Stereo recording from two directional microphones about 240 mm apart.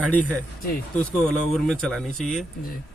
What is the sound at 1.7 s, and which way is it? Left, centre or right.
Speech, centre.